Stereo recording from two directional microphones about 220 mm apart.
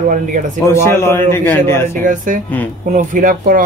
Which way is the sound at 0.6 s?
10° left (ahead or behind).